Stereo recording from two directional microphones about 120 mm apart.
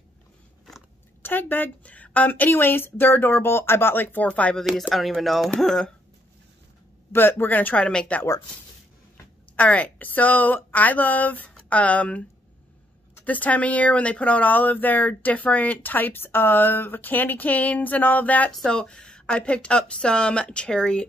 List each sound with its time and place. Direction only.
1.2 s speech: 15° left (ahead or behind)
7.1 s speech: 20° left (ahead or behind)